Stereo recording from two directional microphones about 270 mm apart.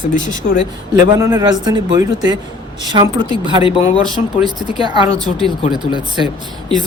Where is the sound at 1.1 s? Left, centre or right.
Centre.